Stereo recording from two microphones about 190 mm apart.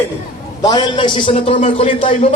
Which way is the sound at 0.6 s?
20° left (ahead or behind).